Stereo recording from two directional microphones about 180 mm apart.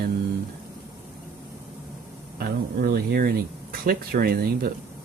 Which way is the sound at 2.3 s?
55° right (ahead or behind).